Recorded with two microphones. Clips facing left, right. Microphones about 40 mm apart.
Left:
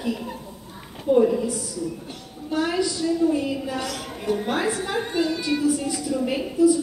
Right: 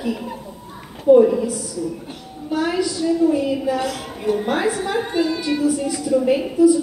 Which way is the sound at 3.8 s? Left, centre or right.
Centre.